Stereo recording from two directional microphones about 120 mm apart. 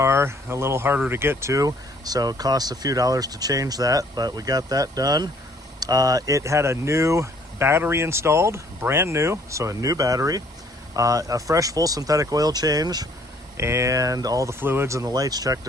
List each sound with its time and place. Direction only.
0.0 s speech: 20° right (ahead or behind)
13.6 s speech: 20° right (ahead or behind)